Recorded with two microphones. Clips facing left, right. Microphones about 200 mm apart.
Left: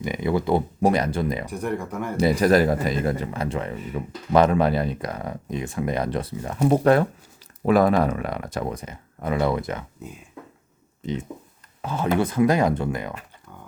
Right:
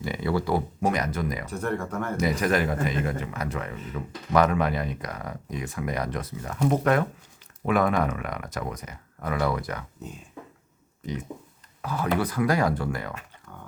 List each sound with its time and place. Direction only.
0.0 s speech: 20° left (ahead or behind)
0.8 s speech: 30° left (ahead or behind)
1.5 s speech: 15° left (ahead or behind)
2.1 s speech: 35° left (ahead or behind)
11.0 s a sound: 25° left (ahead or behind)
11.8 s speech: 25° left (ahead or behind)